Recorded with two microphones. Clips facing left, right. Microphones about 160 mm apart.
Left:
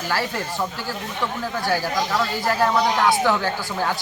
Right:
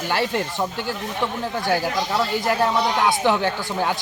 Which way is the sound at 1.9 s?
20° right (ahead or behind).